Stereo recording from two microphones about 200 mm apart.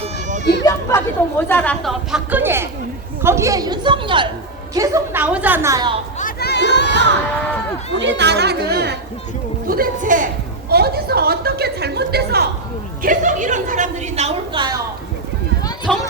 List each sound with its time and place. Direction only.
0.0 s a sound: 35° right (ahead or behind)
0.6 s a woman's voice: 15° left (ahead or behind); by 6.0 s 20° right (ahead or behind)
6.1 s speech: 45° left (ahead or behind)
7.9 s speech: 60° right (ahead or behind); by 10.2 s 40° right (ahead or behind)
10.7 s a woman's voice: 50° right (ahead or behind)
13.0 s a woman's voice: 40° right (ahead or behind)
15.9 s speech: centre (ahead or behind)